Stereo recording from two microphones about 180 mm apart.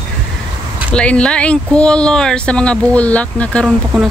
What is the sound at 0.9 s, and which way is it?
Speech, 5° left (ahead or behind).